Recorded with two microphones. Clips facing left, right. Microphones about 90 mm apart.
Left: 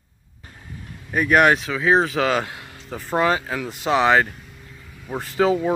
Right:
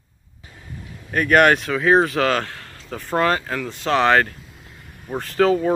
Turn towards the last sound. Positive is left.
turn(degrees=5)  # may be behind; listen again after turning